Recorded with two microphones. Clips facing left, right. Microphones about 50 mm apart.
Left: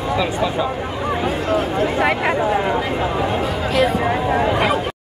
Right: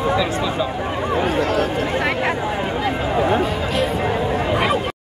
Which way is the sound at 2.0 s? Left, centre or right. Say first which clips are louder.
Left 2 dB; centre.